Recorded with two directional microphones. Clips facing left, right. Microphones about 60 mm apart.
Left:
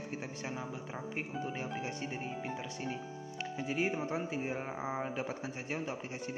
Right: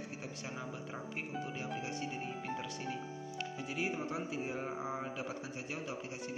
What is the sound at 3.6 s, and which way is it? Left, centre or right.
Speech, left.